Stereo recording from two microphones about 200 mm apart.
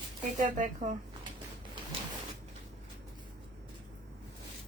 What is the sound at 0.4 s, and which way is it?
Speech, 40° right (ahead or behind).